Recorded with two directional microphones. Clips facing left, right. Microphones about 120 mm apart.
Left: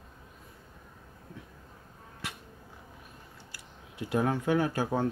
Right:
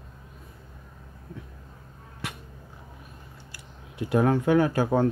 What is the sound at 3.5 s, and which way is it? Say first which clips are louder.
Speech: right 3 dB; 60° right (ahead or behind).